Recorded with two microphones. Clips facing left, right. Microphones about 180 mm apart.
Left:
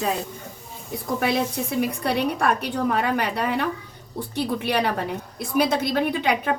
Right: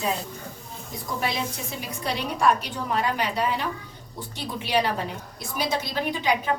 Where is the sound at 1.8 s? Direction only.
60° left (ahead or behind).